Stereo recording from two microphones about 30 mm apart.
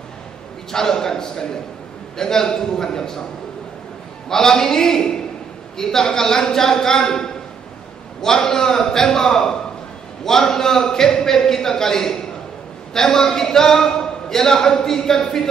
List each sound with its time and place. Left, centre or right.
0.7 s a man's voice: centre
4.3 s a man's voice: centre